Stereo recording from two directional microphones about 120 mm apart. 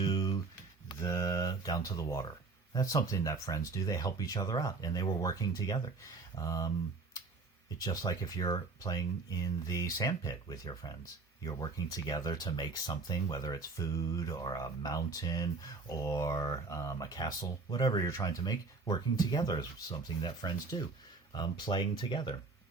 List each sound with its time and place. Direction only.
0.1 s a sound: 35° left (ahead or behind)
2.0 s speech: 25° left (ahead or behind)
7.8 s speech: 35° left (ahead or behind)